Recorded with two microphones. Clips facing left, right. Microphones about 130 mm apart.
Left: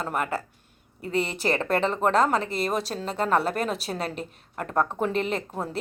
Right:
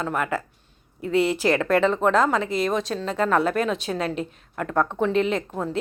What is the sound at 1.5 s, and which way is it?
Speech, 30° left (ahead or behind).